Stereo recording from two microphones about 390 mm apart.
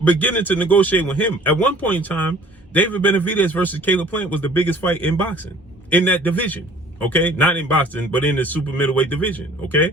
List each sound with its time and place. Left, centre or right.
0.0 s a man's voice: centre